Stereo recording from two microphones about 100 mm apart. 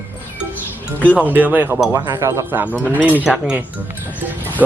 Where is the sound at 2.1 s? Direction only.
30° right (ahead or behind).